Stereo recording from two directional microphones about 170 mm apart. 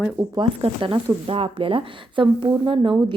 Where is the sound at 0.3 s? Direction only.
30° right (ahead or behind).